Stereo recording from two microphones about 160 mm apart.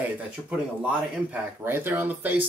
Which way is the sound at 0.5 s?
5° right (ahead or behind).